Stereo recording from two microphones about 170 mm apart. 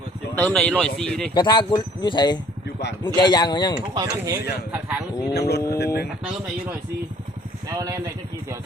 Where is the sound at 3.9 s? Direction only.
25° right (ahead or behind).